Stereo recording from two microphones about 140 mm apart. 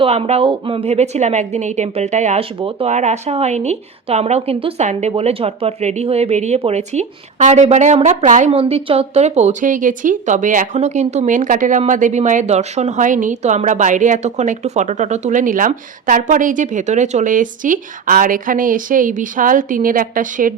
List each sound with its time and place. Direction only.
0.0 s a woman's voice: 45° right (ahead or behind)
2.6 s speech: 40° right (ahead or behind)
2.9 s a woman's voice: 55° right (ahead or behind)
8.4 s a woman's voice: 45° right (ahead or behind); by 20.5 s 75° right (ahead or behind)